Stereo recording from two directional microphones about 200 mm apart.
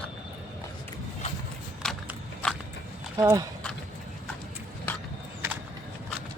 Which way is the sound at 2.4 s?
5° left (ahead or behind).